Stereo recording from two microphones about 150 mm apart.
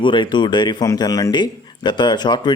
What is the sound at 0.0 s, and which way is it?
A man's voice, 30° left (ahead or behind).